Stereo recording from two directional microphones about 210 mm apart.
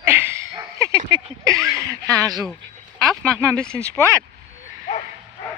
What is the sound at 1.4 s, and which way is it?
Speech, 15° right (ahead or behind).